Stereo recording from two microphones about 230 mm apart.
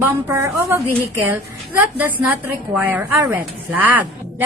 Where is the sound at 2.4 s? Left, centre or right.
Centre.